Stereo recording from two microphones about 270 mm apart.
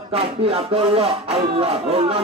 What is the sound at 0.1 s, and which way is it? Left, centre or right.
Music, right.